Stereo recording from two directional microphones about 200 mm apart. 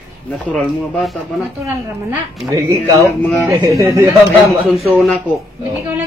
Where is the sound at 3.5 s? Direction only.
15° right (ahead or behind).